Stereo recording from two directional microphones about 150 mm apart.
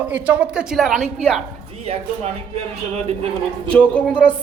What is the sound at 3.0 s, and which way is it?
Speech, 45° right (ahead or behind).